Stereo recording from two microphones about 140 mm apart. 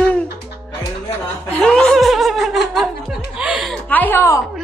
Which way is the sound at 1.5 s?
5° left (ahead or behind).